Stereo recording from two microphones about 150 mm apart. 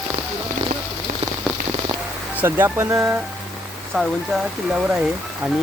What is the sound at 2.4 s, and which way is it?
Speech, 15° right (ahead or behind).